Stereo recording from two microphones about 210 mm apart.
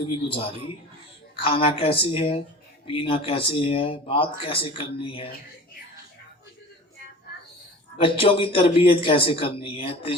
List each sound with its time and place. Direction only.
0.0 s speech: 25° left (ahead or behind)
7.9 s speech: 25° left (ahead or behind)